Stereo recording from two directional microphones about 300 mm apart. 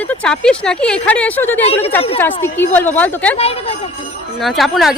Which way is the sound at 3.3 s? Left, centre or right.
Centre.